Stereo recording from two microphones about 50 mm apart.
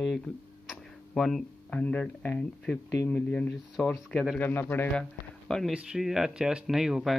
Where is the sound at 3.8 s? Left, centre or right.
Left.